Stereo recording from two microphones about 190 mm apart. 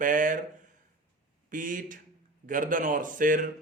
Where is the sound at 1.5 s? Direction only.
45° right (ahead or behind).